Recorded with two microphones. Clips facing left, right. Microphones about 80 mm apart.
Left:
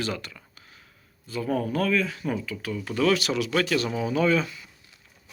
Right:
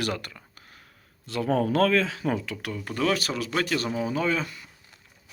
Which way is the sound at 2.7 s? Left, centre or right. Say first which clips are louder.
Left 3 dB; right.